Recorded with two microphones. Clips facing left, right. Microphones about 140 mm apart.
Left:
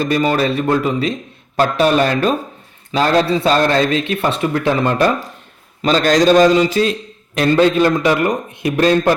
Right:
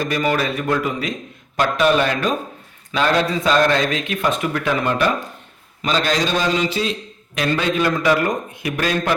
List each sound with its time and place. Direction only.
0.0 s a man's voice: 30° left (ahead or behind)
5.8 s a man's voice: 40° left (ahead or behind)
7.3 s a man's voice: 35° left (ahead or behind)